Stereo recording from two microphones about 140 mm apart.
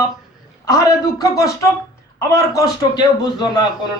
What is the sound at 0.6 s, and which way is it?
Speech, 25° left (ahead or behind).